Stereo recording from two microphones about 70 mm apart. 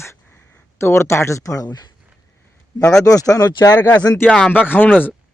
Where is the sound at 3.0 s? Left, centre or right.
Left.